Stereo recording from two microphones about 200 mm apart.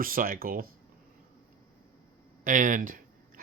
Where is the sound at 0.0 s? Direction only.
45° right (ahead or behind).